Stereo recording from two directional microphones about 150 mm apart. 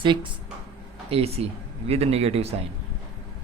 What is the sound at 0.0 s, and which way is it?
Speech, 35° right (ahead or behind).